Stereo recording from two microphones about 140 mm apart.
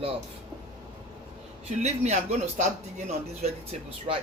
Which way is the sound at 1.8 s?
55° right (ahead or behind).